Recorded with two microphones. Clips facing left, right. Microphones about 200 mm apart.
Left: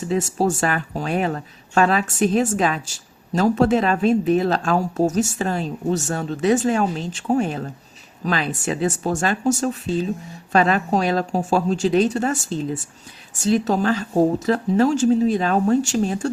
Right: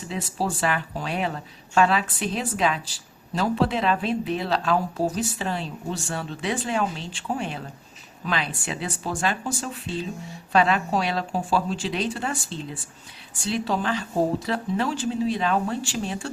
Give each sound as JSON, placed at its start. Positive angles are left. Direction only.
{"t": 0.1, "sound": "speech", "side_deg": 45}